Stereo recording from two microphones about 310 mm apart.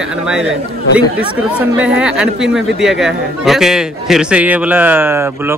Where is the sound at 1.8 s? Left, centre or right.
Centre.